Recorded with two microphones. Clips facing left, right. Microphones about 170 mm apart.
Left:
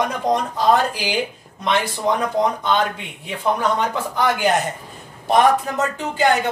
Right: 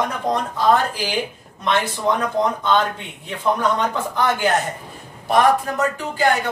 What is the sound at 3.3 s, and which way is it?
Speech, 10° left (ahead or behind).